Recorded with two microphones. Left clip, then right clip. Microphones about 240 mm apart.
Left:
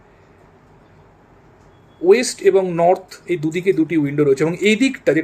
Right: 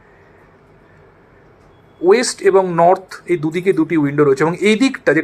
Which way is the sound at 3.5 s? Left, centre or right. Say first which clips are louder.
Even; right.